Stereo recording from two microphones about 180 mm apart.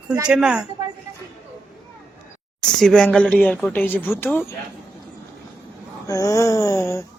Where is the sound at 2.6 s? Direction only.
5° left (ahead or behind).